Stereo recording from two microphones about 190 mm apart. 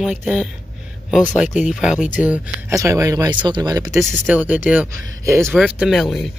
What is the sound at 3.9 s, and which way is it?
Speech, centre (ahead or behind).